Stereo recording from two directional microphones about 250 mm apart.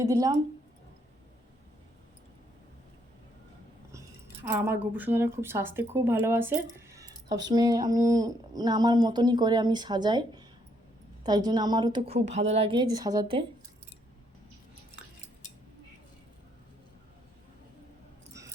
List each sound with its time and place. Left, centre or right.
0.0 s speech: centre
4.4 s speech: centre